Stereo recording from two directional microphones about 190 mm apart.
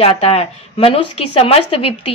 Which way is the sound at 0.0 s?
30° left (ahead or behind).